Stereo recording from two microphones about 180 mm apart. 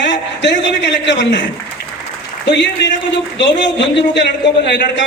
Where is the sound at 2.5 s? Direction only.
80° left.